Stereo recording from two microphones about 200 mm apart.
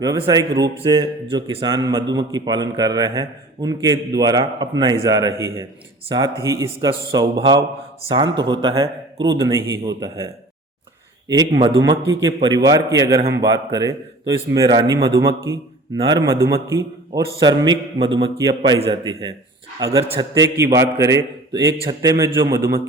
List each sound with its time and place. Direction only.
0.0 s a man's voice: 20° right (ahead or behind)